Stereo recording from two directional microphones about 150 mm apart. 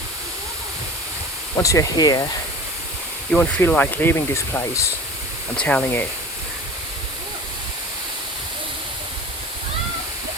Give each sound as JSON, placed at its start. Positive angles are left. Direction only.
{"t": 1.5, "sound": "speech", "side_deg": 20}
{"t": 3.3, "sound": "speech", "side_deg": 10}
{"t": 5.5, "sound": "speech", "side_deg": 5}